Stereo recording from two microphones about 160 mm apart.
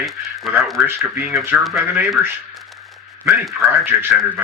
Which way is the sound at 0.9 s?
10° right (ahead or behind).